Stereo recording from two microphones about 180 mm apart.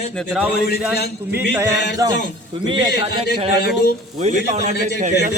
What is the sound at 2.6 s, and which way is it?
Speech, 30° right (ahead or behind).